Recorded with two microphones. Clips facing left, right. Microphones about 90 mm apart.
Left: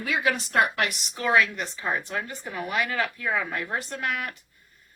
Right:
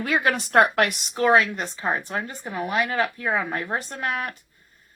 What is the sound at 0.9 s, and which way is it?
Speech, 35° right (ahead or behind).